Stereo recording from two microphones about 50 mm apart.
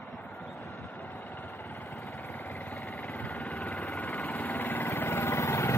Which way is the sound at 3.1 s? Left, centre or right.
Left.